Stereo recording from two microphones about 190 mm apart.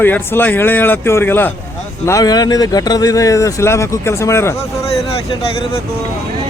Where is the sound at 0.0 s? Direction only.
10° left (ahead or behind).